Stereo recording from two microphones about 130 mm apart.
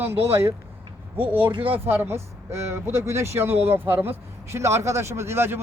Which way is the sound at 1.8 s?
15° right (ahead or behind).